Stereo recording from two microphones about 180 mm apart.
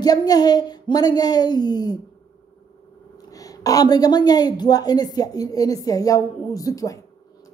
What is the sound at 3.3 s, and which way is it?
Speech, 20° left (ahead or behind).